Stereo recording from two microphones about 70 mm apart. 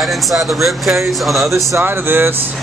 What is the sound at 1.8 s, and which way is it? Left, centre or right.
Speech, right.